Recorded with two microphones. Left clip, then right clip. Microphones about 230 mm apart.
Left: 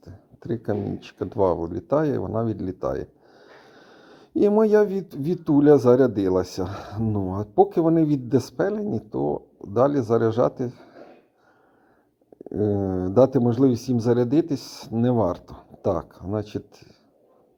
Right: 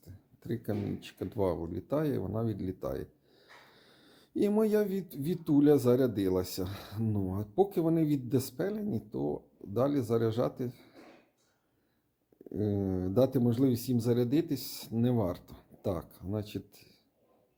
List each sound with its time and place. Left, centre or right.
0.0 s speech: left
12.5 s speech: left